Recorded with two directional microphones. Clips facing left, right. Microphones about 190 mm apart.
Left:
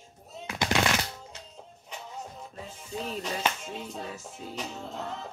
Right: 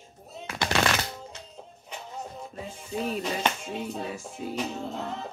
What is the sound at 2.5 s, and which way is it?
Music, 15° right (ahead or behind).